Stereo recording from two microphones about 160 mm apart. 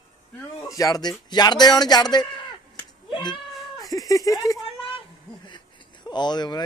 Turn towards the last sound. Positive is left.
turn(degrees=25)  # may be behind; listen again after turning